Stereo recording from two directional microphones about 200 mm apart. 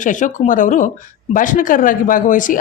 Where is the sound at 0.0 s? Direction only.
40° left (ahead or behind).